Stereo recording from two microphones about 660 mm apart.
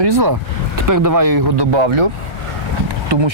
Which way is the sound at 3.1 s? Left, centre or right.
Right.